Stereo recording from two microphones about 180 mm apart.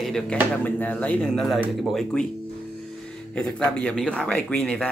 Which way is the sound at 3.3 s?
5° left (ahead or behind).